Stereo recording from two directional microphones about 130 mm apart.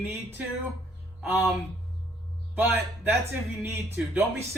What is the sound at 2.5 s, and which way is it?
Speech, 15° right (ahead or behind).